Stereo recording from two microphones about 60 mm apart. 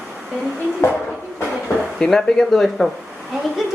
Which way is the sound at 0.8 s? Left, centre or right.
Left.